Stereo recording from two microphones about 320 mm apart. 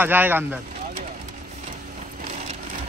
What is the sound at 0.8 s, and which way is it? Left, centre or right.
Vehicle, right.